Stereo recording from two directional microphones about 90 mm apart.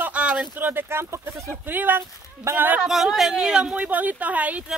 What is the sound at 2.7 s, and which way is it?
Speech, 5° right (ahead or behind).